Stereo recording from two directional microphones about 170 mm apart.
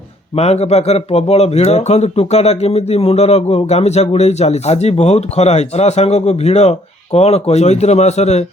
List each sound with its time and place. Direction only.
0.3 s speech: 40° left (ahead or behind)